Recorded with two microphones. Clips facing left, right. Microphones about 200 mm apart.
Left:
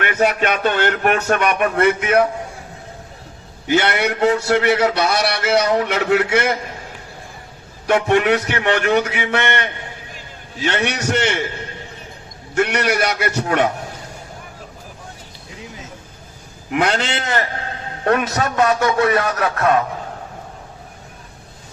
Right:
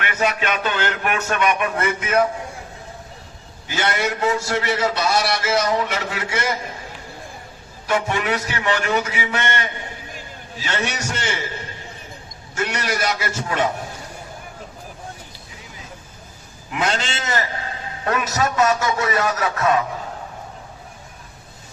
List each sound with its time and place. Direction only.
0.0 s a sound: 40° left (ahead or behind)
0.3 s a man's voice: 55° left (ahead or behind)
3.7 s a man's voice: 65° left (ahead or behind)
7.9 s a man's voice: 65° left (ahead or behind)
12.5 s a man's voice: 65° left (ahead or behind)
16.7 s a man's voice: 60° left (ahead or behind)